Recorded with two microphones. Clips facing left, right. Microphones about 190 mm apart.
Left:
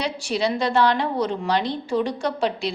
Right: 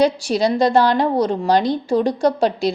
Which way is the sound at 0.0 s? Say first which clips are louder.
Right 8 dB; 40° right (ahead or behind).